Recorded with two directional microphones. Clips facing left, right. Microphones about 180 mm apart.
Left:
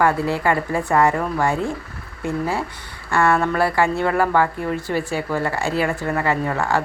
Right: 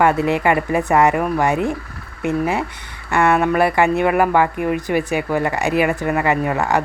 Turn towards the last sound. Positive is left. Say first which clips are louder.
# right 3 dB
turn(degrees=-20)  # may be behind; listen again after turning